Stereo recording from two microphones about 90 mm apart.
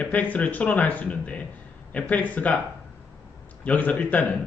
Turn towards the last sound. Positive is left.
turn(degrees=15)  # may be behind; listen again after turning